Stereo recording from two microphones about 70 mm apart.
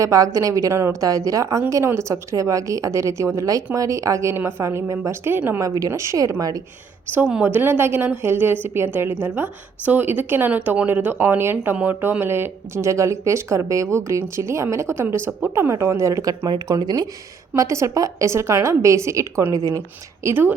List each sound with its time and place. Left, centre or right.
0.0 s a woman's voice: right
0.7 s a woman's voice: right
0.9 s a woman's voice: right
4.6 s a woman's voice: right
7.4 s a woman's voice: right
15.4 s a woman's voice: right
15.7 s a woman's voice: right
16.7 s speech: right
17.5 s a woman's voice: right
19.5 s a woman's voice: right
20.2 s a woman's voice: right